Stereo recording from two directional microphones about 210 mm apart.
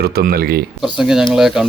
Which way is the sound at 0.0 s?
45° right (ahead or behind).